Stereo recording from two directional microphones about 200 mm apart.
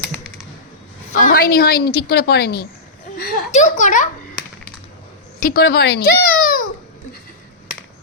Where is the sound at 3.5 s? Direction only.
35° left (ahead or behind).